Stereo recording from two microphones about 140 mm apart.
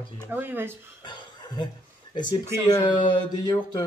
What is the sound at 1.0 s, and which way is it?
Chuckle, 35° left (ahead or behind).